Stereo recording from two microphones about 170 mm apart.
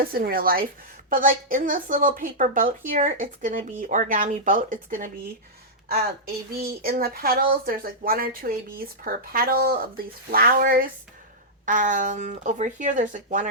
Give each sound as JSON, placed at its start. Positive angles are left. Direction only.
{"t": 0.0, "sound": "a woman's voice", "side_deg": -60}
{"t": 6.5, "sound": "a woman's voice", "side_deg": -65}